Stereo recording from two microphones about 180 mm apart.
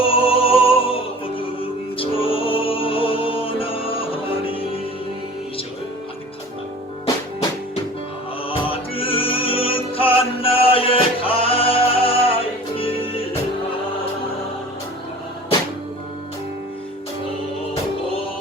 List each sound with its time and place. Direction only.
0.0 s music: 30° left (ahead or behind)
2.0 s music: 30° left (ahead or behind)
8.4 s music: 30° left (ahead or behind)